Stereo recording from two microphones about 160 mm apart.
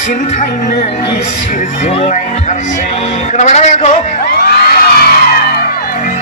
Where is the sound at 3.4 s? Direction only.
45° left (ahead or behind).